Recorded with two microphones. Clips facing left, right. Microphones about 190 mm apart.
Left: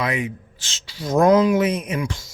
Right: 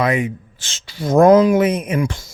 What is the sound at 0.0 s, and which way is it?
Speech, 50° right (ahead or behind).